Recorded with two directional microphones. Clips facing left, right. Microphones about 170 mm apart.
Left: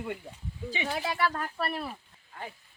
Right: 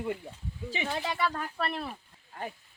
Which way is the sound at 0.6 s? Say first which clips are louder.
Left 1 dB; centre (ahead or behind).